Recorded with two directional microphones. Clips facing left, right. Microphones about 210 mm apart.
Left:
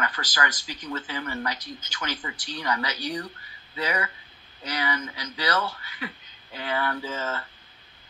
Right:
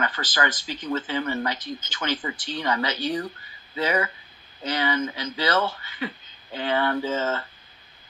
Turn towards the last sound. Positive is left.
turn(degrees=-25)  # may be behind; listen again after turning